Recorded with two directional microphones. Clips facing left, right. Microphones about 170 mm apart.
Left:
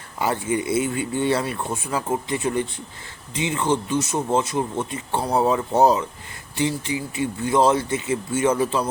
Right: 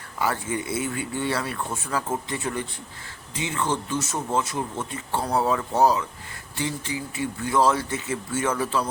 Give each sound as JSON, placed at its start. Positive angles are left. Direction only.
{"t": 0.2, "sound": "speech", "side_deg": 20}